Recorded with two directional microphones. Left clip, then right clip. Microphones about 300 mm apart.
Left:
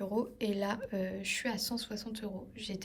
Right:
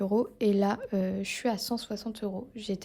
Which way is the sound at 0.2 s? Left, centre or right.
Centre.